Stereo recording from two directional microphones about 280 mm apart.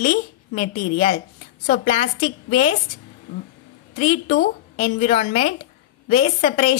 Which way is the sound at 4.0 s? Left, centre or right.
Left.